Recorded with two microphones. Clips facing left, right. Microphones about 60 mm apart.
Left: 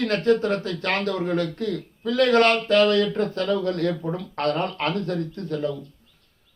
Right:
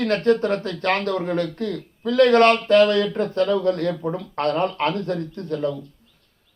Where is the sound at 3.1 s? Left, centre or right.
Centre.